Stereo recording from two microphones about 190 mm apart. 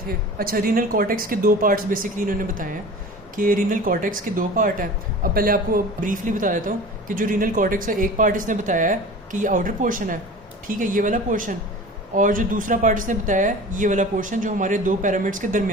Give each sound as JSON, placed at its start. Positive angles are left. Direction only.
{"t": 0.3, "sound": "speech", "side_deg": -50}